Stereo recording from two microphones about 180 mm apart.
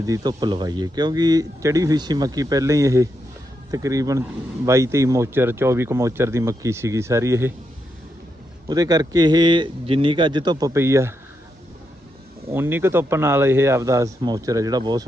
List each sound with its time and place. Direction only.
0.0 s speech: 20° right (ahead or behind)
8.6 s speech: 20° right (ahead or behind)
12.5 s speech: 10° right (ahead or behind)